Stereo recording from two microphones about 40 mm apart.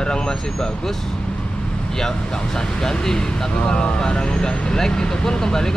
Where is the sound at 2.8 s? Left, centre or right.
Centre.